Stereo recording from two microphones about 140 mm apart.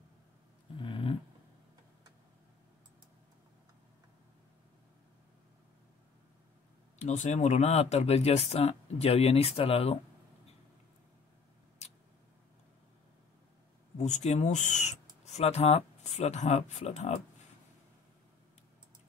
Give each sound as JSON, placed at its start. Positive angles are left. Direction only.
{"t": 0.7, "sound": "dog", "side_deg": 35}
{"t": 7.0, "sound": "speech", "side_deg": 55}
{"t": 11.8, "sound": "tick", "side_deg": 50}
{"t": 13.9, "sound": "speech", "side_deg": 55}